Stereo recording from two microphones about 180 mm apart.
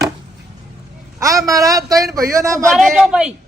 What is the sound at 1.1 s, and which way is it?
Speech, 20° right (ahead or behind).